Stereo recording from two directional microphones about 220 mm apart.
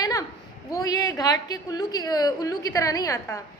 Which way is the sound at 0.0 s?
15° left (ahead or behind).